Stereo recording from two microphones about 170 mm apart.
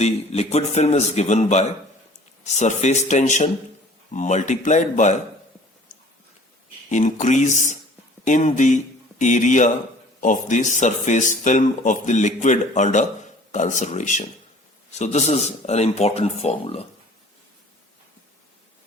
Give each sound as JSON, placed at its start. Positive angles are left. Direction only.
{"t": 0.0, "sound": "a man's voice", "side_deg": 40}
{"t": 6.9, "sound": "a man's voice", "side_deg": 45}